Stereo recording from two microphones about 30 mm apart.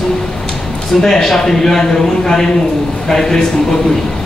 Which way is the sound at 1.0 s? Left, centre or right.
Centre.